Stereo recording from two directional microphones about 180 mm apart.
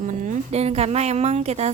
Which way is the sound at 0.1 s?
40° right (ahead or behind).